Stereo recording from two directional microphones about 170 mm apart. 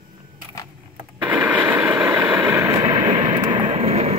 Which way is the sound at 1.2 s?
10° right (ahead or behind).